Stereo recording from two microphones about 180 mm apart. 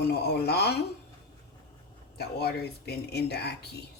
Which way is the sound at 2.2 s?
65° left (ahead or behind).